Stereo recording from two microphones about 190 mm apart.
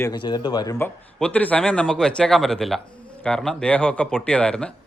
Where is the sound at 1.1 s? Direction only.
5° left (ahead or behind).